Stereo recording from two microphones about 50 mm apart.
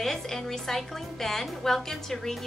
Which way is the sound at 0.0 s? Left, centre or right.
Centre.